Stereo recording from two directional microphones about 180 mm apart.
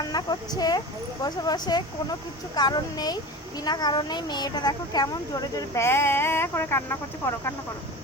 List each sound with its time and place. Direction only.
0.1 s speech: 20° left (ahead or behind)